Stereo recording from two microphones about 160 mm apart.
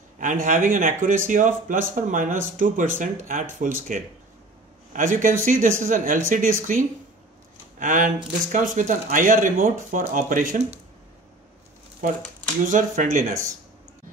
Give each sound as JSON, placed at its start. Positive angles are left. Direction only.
{"t": 0.2, "sound": "speech", "side_deg": -55}
{"t": 12.0, "sound": "speech", "side_deg": -55}